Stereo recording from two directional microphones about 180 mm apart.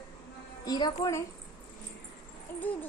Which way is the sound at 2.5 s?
10° left (ahead or behind).